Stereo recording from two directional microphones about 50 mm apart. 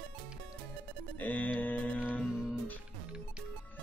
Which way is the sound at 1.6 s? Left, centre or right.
Left.